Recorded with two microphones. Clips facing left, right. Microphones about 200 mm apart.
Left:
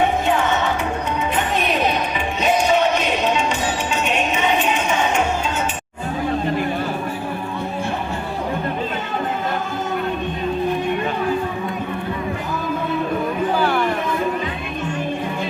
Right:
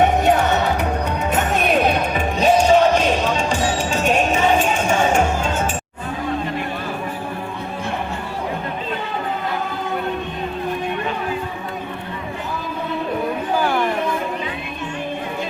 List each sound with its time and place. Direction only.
0.3 s music: 40° right (ahead or behind)
2.4 s music: 30° right (ahead or behind)
4.0 s music: 45° right (ahead or behind)
13.6 s a sound: 10° right (ahead or behind)